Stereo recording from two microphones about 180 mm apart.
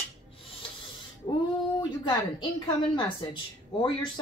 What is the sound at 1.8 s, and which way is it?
A woman's voice, 25° left (ahead or behind).